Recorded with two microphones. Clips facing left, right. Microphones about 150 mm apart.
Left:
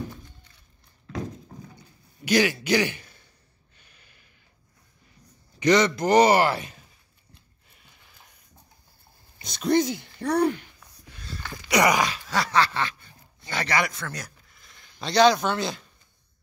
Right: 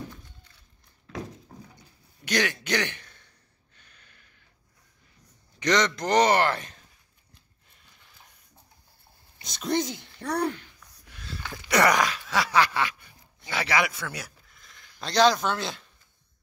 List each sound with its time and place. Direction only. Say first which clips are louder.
2.2 s a man's voice: left 6 dB; 5° left (ahead or behind)
3.7 s gasp: even; 10° left (ahead or behind)
5.6 s a man's voice: left 4 dB; 5° left (ahead or behind)
9.4 s speech: left 5 dB; centre (ahead or behind)
10.4 s a man's voice: left 6 dB; 15° left (ahead or behind)
11.1 s a sound: left 1 dB; centre (ahead or behind)
11.7 s a man's voice: left 1 dB; 15° left (ahead or behind)
12.0 s speech: even; centre (ahead or behind)